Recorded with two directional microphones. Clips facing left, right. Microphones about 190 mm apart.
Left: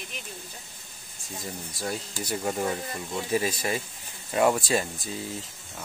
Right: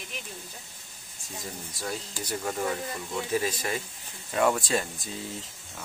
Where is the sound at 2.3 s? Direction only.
20° left (ahead or behind).